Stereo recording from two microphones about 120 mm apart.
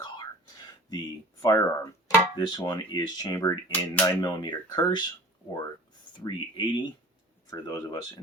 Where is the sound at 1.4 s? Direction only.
30° left (ahead or behind).